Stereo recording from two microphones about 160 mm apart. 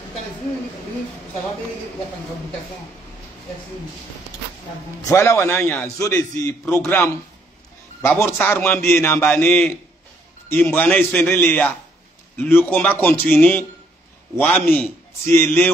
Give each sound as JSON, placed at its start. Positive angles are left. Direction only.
{"t": 5.0, "sound": "a man's voice", "side_deg": 15}